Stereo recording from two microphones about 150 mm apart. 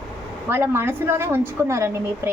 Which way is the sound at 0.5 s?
15° right (ahead or behind).